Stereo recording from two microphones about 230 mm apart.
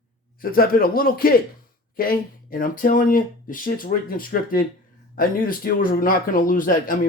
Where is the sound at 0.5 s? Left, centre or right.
Left.